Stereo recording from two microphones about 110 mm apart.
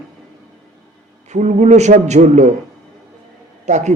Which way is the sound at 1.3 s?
90° right.